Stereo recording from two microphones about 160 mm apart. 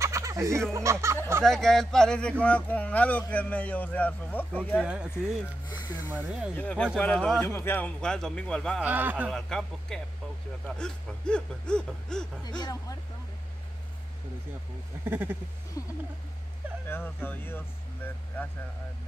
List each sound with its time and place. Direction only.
0.0 s a sound: 20° right (ahead or behind)
0.7 s speech: 15° right (ahead or behind)
1.4 s speech: 5° left (ahead or behind)
5.7 s speech: 25° left (ahead or behind)
6.0 s speech: 10° right (ahead or behind)
6.5 s speech: 10° left (ahead or behind)
8.8 s speech: 10° right (ahead or behind)
9.3 s speech: 5° left (ahead or behind)
12.4 s speech: 25° left (ahead or behind)
15.0 s speech: 15° right (ahead or behind)
15.8 s speech: 20° left (ahead or behind)